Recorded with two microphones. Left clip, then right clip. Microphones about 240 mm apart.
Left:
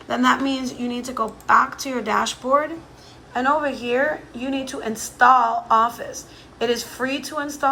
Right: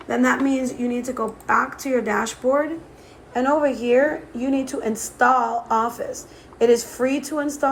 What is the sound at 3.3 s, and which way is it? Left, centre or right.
A woman's voice, right.